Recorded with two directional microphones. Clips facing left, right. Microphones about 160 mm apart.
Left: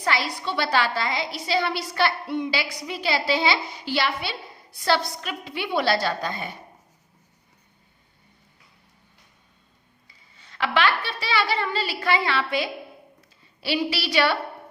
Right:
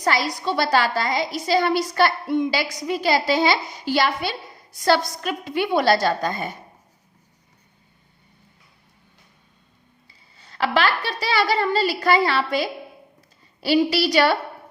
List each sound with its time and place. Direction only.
0.0 s a woman's voice: 40° right (ahead or behind)
10.1 s a woman's voice: 35° right (ahead or behind)